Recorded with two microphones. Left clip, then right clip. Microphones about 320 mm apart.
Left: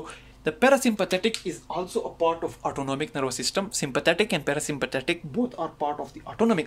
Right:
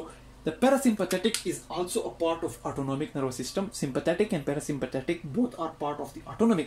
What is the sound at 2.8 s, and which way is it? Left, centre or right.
Speech, left.